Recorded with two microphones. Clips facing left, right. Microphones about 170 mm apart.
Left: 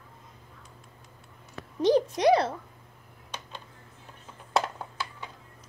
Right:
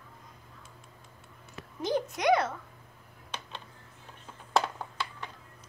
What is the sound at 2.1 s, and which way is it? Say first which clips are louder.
Speech: left 4 dB; 35° left (ahead or behind).